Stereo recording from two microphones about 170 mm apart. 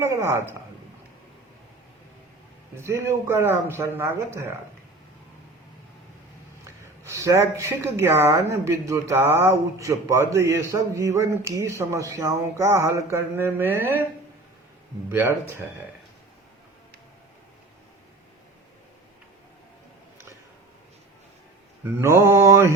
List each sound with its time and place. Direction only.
0.0 s speech: 15° right (ahead or behind)
2.7 s speech: 15° right (ahead or behind)
7.0 s speech: 15° right (ahead or behind)
15.1 s speech: 10° right (ahead or behind)
21.8 s speech: 15° right (ahead or behind)